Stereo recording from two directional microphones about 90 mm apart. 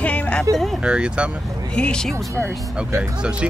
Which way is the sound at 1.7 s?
10° left (ahead or behind).